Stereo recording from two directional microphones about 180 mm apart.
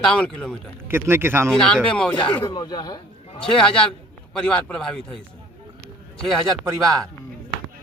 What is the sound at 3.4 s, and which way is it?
Speech, 5° left (ahead or behind).